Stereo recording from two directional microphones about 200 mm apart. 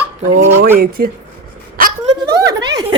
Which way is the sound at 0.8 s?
50° right (ahead or behind).